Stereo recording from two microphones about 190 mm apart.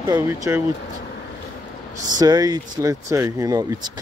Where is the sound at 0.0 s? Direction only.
15° right (ahead or behind).